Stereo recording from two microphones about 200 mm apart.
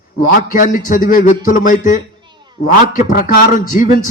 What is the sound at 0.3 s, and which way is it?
A man's voice, 40° left (ahead or behind).